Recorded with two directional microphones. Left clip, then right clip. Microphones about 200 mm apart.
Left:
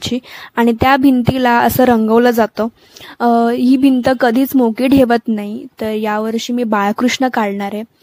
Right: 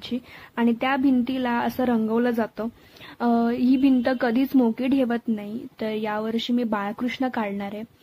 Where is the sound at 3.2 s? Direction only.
40° left (ahead or behind).